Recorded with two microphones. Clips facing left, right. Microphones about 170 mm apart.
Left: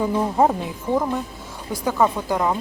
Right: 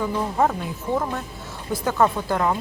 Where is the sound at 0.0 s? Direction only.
25° left (ahead or behind).